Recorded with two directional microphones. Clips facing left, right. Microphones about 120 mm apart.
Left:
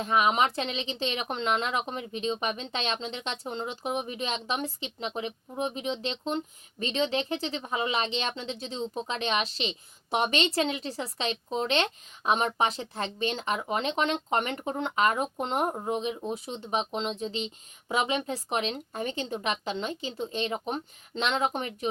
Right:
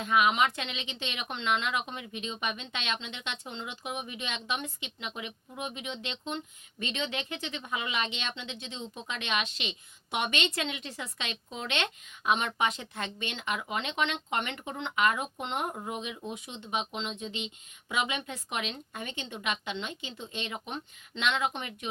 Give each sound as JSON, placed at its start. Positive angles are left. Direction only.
{"t": 0.0, "sound": "speech", "side_deg": 35}